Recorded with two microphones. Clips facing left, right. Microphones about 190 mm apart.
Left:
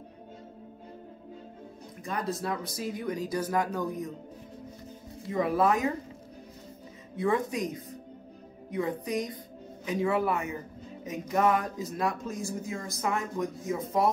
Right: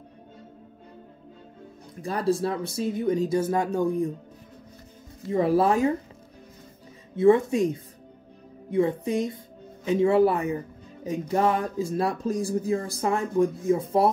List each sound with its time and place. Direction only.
2.0 s speech: 35° right (ahead or behind)
5.3 s speech: 30° right (ahead or behind)
7.2 s speech: 25° right (ahead or behind)